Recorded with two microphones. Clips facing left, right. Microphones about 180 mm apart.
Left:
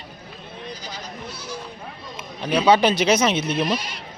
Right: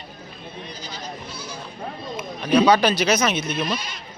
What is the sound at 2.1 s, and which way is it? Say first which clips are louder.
Speech: right 5 dB; 30° left (ahead or behind).